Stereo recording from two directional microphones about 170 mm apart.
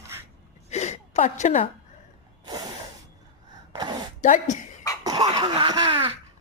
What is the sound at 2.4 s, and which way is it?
Snort, 25° right (ahead or behind).